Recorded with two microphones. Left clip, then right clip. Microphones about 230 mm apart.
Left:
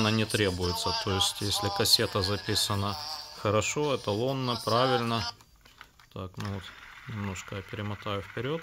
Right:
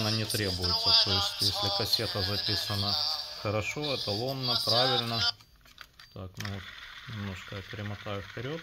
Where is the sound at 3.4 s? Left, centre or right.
Left.